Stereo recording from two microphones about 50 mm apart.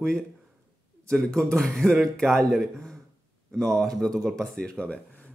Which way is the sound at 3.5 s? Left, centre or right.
Centre.